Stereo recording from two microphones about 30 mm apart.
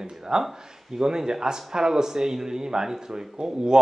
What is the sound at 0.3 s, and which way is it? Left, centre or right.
A man's voice, right.